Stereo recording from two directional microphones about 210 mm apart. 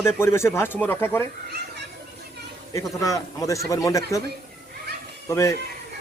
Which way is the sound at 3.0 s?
15° left (ahead or behind).